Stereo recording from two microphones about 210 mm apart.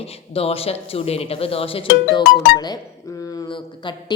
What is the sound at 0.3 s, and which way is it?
Speech, 30° left (ahead or behind).